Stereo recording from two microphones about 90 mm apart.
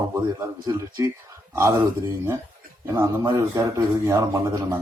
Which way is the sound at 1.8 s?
25° right (ahead or behind).